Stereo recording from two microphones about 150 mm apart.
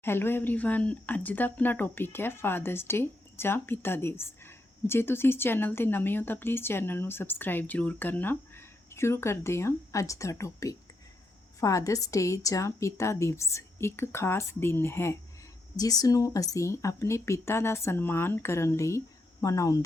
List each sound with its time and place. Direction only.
0.0 s speech: 15° left (ahead or behind)